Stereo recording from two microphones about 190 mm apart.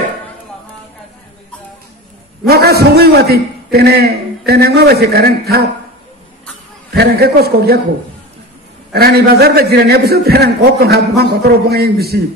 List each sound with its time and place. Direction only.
2.4 s a man's voice: 55° right (ahead or behind)
6.9 s a man's voice: 55° right (ahead or behind)
8.9 s a man's voice: 55° right (ahead or behind)